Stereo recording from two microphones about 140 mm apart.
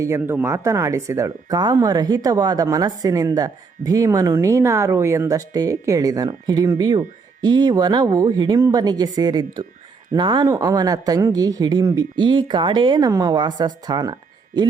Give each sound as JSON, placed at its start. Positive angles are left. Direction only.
{"t": 0.0, "sound": "speech", "side_deg": -15}